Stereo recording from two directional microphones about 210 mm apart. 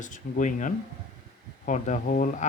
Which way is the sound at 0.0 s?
40° left (ahead or behind).